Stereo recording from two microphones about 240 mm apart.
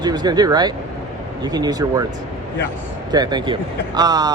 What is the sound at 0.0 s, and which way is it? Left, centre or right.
Speech, centre.